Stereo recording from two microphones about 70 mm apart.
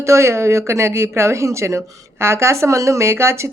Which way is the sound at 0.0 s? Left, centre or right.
Right.